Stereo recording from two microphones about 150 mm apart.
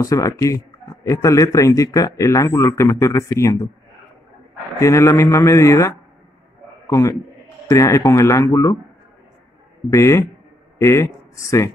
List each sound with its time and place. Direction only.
0.0 s a man's voice: 25° left (ahead or behind)
4.7 s a man's voice: 20° left (ahead or behind)
9.8 s a man's voice: 20° left (ahead or behind)